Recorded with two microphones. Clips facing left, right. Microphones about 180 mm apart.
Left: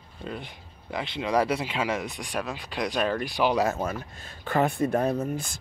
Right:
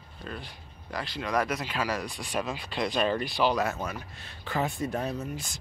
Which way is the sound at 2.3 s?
Centre (ahead or behind).